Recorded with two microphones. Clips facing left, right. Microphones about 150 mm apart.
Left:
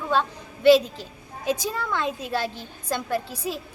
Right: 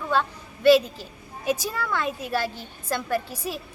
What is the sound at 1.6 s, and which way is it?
Speech, 15° left (ahead or behind).